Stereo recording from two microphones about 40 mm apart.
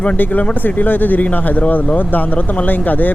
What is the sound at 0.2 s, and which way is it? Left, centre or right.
Speech, left.